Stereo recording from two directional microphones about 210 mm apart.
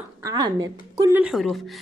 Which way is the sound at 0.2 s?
20° right (ahead or behind).